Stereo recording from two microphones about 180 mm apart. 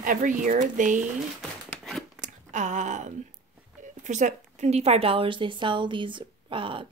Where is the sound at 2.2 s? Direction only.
40° right (ahead or behind).